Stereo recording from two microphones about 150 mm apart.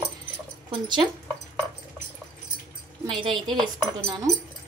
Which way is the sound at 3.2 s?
Centre (ahead or behind).